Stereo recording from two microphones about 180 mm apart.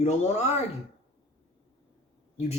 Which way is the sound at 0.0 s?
40° left (ahead or behind).